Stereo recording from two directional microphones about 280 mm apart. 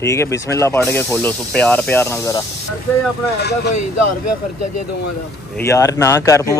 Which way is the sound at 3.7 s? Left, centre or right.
Left.